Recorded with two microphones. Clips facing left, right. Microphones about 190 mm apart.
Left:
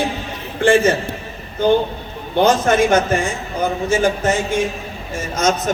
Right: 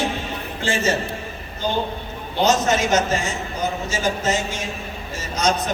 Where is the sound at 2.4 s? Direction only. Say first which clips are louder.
Left 5 dB; 55° left (ahead or behind).